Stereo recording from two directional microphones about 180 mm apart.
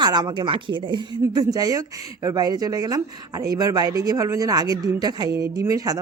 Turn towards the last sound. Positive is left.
turn(degrees=-20)  # may be behind; listen again after turning